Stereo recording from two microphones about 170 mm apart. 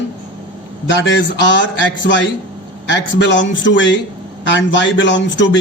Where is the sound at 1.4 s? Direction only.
90° left.